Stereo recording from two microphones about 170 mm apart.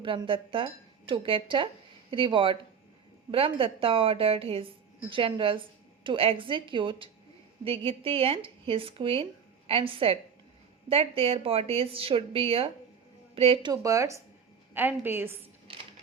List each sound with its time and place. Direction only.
0.0 s a woman's voice: 30° right (ahead or behind); by 15.4 s 15° right (ahead or behind)